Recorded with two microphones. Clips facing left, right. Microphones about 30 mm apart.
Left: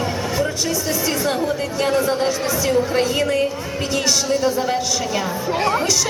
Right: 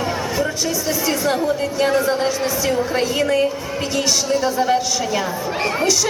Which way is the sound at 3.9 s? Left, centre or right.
Centre.